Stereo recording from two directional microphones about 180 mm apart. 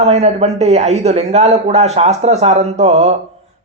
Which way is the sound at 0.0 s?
35° right (ahead or behind).